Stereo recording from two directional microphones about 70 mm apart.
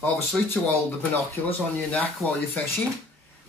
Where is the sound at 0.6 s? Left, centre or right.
Centre.